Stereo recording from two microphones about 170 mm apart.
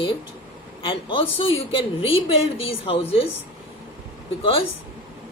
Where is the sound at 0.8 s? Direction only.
30° left (ahead or behind).